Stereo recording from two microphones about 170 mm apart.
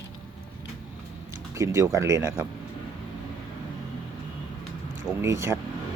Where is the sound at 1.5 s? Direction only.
15° right (ahead or behind).